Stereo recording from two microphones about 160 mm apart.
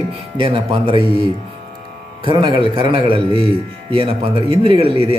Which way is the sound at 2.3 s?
30° right (ahead or behind).